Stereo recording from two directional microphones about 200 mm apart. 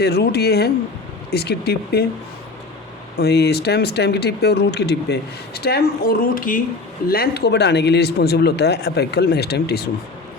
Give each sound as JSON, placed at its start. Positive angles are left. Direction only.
{"t": 0.0, "sound": "speech", "side_deg": 55}
{"t": 3.2, "sound": "speech", "side_deg": 55}